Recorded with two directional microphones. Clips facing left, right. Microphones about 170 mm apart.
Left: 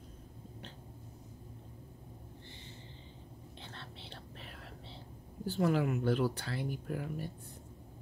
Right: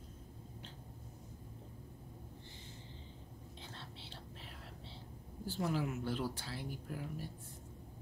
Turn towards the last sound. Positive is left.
turn(degrees=65)  # may be behind; listen again after turning